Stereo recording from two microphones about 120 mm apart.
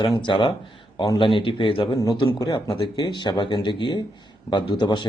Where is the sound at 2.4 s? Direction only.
30° left (ahead or behind).